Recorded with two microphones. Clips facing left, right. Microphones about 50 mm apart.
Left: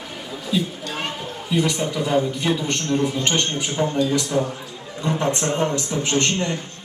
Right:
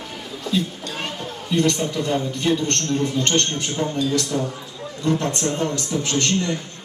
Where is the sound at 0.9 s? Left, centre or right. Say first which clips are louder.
Left 1 dB; centre.